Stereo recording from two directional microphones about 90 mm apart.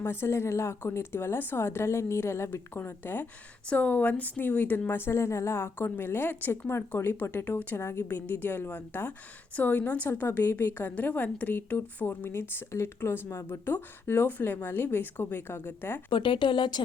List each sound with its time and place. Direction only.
0.0 s a woman's voice: 25° left (ahead or behind)
16.0 s speech: 65° left (ahead or behind)